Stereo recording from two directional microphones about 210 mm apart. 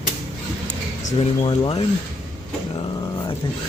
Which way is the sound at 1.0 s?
25° left (ahead or behind).